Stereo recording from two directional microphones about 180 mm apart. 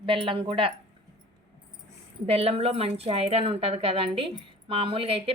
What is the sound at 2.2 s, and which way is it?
A woman's voice, 35° right (ahead or behind).